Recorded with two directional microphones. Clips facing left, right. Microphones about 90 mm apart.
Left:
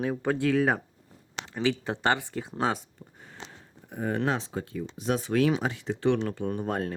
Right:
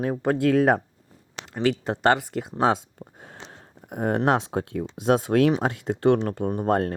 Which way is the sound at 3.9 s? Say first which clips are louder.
Right 6 dB; 70° right (ahead or behind).